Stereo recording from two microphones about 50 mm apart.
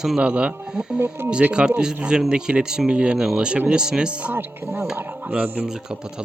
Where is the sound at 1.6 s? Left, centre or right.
Right.